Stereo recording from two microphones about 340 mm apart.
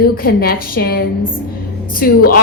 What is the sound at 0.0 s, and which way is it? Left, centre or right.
A woman's voice, left.